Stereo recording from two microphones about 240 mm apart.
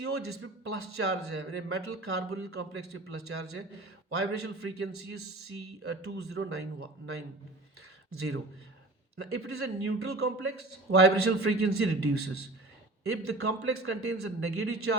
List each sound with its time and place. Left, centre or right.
0.0 s a man's voice: right
8.1 s a man's voice: right